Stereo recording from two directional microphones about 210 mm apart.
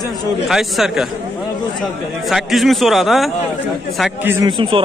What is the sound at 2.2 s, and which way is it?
A man's voice, centre (ahead or behind).